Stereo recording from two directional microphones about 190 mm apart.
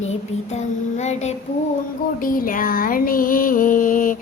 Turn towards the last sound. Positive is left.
turn(degrees=45)  # may be behind; listen again after turning